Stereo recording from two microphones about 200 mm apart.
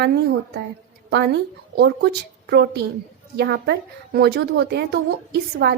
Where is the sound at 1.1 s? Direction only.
55° right (ahead or behind).